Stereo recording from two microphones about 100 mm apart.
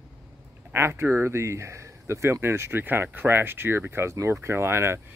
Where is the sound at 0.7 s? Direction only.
25° right (ahead or behind).